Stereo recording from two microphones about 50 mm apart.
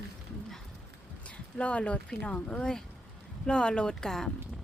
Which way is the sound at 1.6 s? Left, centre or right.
Left.